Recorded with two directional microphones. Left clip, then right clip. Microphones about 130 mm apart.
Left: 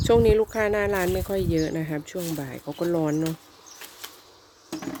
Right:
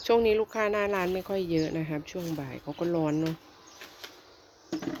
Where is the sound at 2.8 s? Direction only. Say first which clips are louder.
Left 4 dB; 45° left (ahead or behind).